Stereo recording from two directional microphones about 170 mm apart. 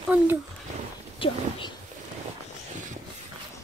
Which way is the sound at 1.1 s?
30° left (ahead or behind).